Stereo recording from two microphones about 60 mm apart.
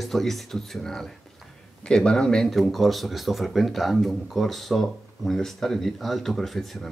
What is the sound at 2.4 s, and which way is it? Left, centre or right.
Speech, centre.